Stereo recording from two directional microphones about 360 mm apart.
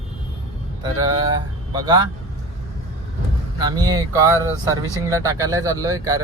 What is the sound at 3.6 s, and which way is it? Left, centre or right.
Speech, centre.